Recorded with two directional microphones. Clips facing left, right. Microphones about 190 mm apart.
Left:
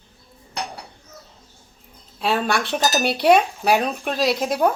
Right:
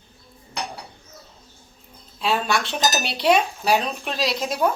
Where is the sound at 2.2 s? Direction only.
55° left (ahead or behind).